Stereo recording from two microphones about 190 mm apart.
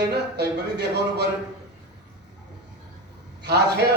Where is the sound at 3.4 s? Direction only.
60° right (ahead or behind).